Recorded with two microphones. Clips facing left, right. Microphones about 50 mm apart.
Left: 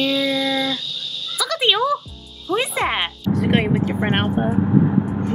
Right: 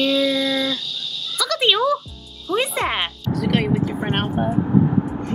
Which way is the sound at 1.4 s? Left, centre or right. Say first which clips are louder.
Even; centre.